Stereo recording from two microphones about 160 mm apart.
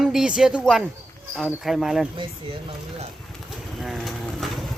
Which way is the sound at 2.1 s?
30° right (ahead or behind).